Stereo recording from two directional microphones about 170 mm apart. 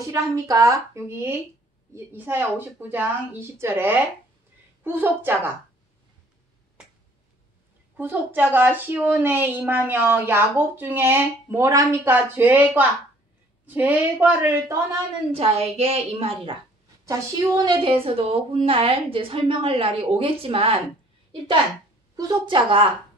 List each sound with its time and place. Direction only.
0.0 s speech: 20° right (ahead or behind)
8.0 s speech: 10° right (ahead or behind)
15.3 s a woman's voice: 35° right (ahead or behind)
17.6 s a woman's voice: 30° right (ahead or behind)
22.1 s a woman's voice: 25° right (ahead or behind)